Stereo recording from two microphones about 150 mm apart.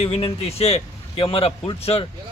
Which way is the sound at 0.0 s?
40° left (ahead or behind).